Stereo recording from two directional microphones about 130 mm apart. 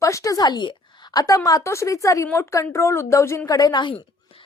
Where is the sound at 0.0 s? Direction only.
25° left (ahead or behind).